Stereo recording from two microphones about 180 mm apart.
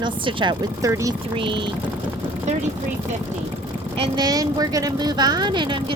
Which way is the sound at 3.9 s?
25° right (ahead or behind).